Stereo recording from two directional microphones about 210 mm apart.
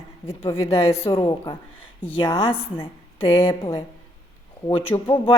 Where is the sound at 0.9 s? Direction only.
25° left (ahead or behind).